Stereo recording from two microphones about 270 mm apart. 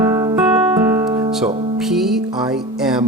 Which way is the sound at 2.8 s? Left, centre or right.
Centre.